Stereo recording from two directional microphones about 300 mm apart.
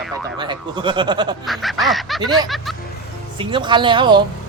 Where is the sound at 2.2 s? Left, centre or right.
Centre.